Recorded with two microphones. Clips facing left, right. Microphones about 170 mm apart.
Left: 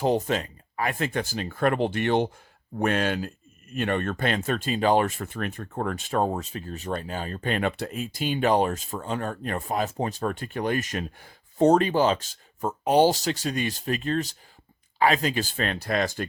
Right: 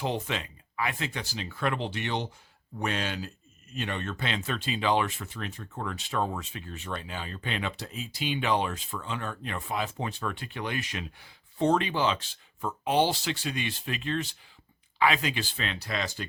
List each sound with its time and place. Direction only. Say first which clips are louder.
0.0 s speech: left 8 dB; 40° left (ahead or behind)